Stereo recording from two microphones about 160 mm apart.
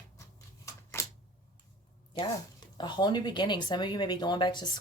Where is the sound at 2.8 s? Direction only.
30° left (ahead or behind).